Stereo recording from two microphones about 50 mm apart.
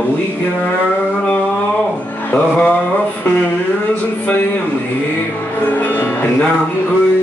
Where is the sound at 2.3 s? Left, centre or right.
Centre.